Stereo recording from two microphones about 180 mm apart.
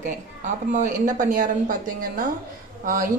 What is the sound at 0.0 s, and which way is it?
A woman's voice, 45° right (ahead or behind).